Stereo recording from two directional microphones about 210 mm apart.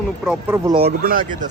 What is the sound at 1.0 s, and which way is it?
Speech, 40° right (ahead or behind).